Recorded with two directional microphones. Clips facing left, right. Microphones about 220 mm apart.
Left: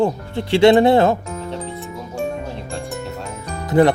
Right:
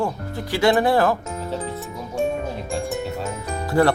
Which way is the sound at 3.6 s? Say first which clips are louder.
Left 4 dB; 20° left (ahead or behind).